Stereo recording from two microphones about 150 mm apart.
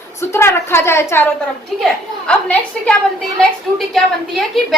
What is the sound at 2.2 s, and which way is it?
Speech, 10° left (ahead or behind).